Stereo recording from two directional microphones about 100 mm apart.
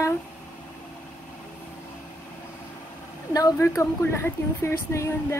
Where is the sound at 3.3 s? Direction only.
35° left (ahead or behind).